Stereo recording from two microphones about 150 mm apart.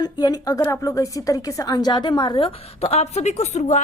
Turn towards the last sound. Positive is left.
turn(degrees=50)  # may be behind; listen again after turning